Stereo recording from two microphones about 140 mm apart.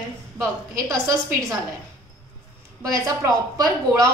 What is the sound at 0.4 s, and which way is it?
Speech, 20° right (ahead or behind).